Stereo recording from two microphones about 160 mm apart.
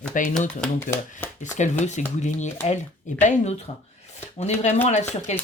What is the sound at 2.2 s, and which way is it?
Speech, 45° left (ahead or behind).